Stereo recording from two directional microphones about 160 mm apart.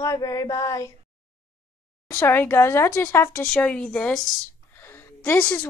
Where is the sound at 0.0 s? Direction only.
20° left (ahead or behind).